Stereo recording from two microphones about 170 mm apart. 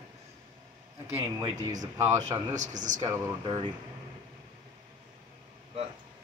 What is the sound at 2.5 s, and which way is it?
Speech, 45° right (ahead or behind).